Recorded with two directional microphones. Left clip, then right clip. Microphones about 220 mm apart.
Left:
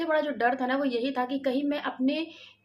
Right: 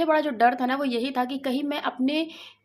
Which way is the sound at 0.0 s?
50° right (ahead or behind).